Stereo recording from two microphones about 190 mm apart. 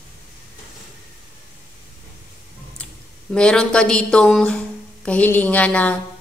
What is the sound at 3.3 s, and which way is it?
A woman's voice, 5° left (ahead or behind).